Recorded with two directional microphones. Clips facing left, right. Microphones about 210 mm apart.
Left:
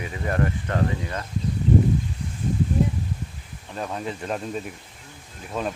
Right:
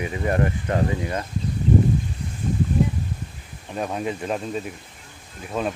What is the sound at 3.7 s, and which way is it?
Speech, 10° right (ahead or behind).